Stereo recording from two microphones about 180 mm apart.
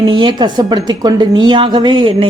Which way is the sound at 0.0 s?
25° right (ahead or behind).